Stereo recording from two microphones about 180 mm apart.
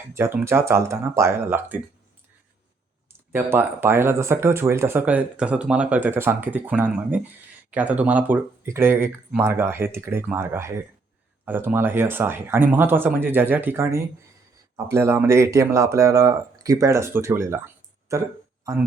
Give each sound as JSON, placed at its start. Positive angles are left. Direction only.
{"t": 0.1, "sound": "speech", "side_deg": -15}
{"t": 3.3, "sound": "speech", "side_deg": -10}